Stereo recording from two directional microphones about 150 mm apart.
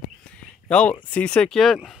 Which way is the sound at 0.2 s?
5° left (ahead or behind).